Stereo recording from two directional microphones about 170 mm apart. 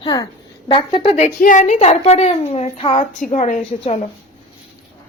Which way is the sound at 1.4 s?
50° left (ahead or behind).